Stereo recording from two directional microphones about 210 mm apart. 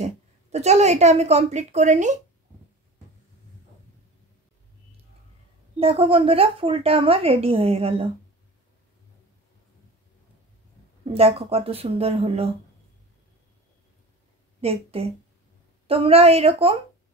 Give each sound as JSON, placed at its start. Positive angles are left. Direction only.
{"t": 0.0, "sound": "a woman's voice", "side_deg": -30}
{"t": 5.8, "sound": "a woman's voice", "side_deg": -25}
{"t": 11.1, "sound": "a woman's voice", "side_deg": -30}
{"t": 14.6, "sound": "a woman's voice", "side_deg": -30}